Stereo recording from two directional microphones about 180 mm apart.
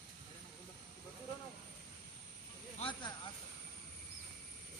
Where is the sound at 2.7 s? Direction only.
30° left (ahead or behind).